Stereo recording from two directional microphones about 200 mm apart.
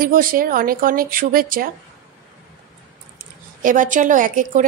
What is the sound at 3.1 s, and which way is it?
Speech, 40° right (ahead or behind).